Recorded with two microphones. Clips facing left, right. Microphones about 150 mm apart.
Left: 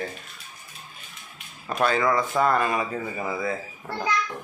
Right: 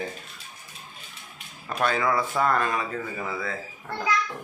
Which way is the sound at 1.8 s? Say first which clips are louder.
Left 2 dB; 5° right (ahead or behind).